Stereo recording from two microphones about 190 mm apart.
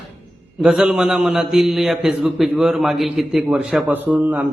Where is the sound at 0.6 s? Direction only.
Centre (ahead or behind).